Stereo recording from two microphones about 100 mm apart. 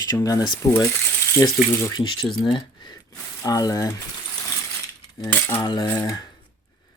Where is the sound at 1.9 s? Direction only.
55° left (ahead or behind).